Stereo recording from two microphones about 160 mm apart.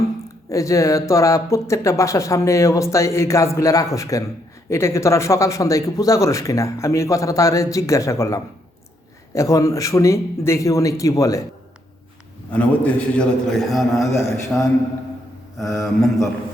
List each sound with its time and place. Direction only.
0.5 s speech: 20° left (ahead or behind)
12.5 s a man's voice: 10° left (ahead or behind)